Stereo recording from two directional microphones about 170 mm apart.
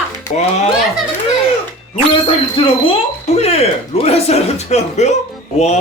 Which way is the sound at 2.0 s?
30° left (ahead or behind).